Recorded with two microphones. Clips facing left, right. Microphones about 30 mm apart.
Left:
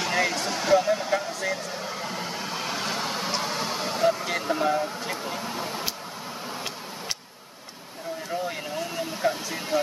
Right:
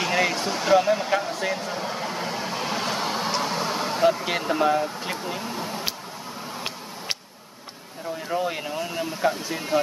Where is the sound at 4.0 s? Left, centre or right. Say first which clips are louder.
Right 2 dB; centre.